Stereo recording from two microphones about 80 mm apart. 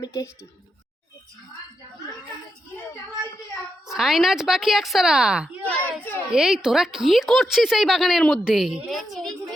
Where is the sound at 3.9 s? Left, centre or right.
Centre.